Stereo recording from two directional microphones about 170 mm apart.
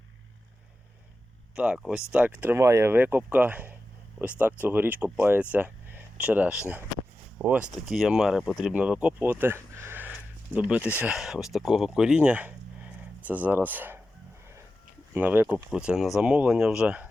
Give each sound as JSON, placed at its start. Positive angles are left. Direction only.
{"t": 1.5, "sound": "speech", "side_deg": -5}
{"t": 15.1, "sound": "speech", "side_deg": -10}